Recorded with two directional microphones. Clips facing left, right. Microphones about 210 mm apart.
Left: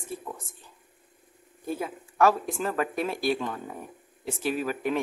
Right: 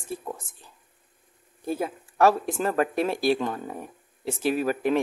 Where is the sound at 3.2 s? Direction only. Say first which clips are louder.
Right 4 dB; 40° right (ahead or behind).